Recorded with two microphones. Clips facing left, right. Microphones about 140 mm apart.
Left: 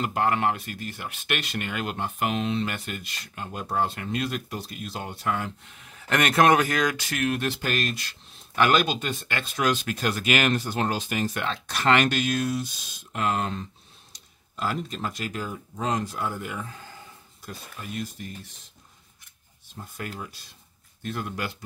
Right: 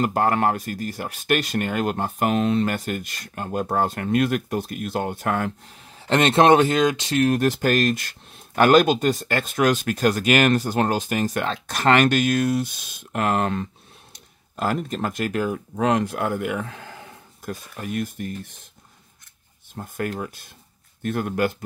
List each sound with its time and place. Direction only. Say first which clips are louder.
0.0 s speech: right 4 dB; 40° right (ahead or behind)
5.7 s speech: right 3 dB; 30° right (ahead or behind)
7.2 s speech: right 6 dB; 45° right (ahead or behind); by 13.7 s 60° right (ahead or behind)
14.6 s speech: right 5 dB; 50° right (ahead or behind); by 17.1 s 70° right (ahead or behind)
17.5 s speech: right 8 dB; 50° right (ahead or behind)
19.7 s speech: right 9 dB; 50° right (ahead or behind)